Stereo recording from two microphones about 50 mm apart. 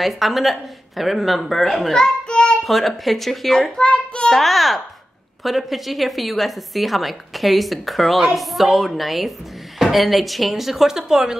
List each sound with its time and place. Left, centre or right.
0.0 s a woman's voice: centre
2.2 s child singing: centre
2.6 s a woman's voice: centre; by 4.3 s left
4.3 s a woman's voice: centre